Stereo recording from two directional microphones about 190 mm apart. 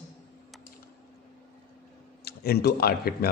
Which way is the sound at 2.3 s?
55° left (ahead or behind).